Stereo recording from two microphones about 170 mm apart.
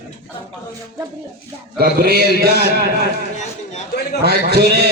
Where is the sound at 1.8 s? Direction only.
65° right (ahead or behind).